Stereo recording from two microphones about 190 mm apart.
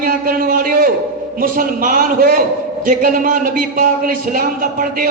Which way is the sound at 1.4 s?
50° right (ahead or behind).